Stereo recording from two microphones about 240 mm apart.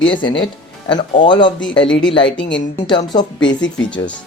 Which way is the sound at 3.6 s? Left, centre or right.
Left.